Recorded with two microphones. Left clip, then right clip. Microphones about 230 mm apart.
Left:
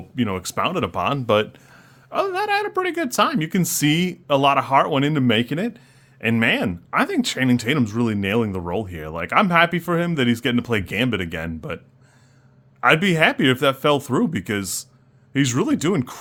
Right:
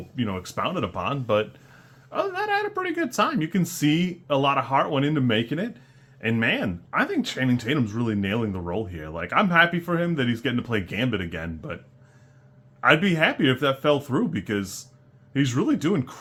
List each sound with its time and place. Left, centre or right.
0.2 s speech: left
12.8 s speech: left